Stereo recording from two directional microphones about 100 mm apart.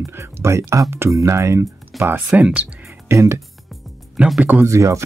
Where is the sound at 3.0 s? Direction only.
30° right (ahead or behind).